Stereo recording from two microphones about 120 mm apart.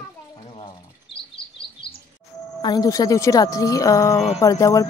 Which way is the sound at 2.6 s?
35° left (ahead or behind).